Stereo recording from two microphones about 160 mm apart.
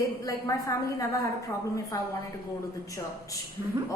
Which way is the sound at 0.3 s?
20° left (ahead or behind).